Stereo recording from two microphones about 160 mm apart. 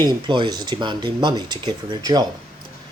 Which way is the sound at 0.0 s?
30° right (ahead or behind).